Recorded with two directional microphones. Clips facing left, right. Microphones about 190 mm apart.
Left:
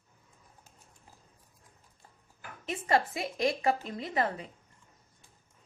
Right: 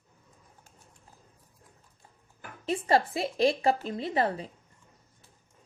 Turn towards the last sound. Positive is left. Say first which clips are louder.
# right 3 dB
turn(degrees=-30)  # may be behind; listen again after turning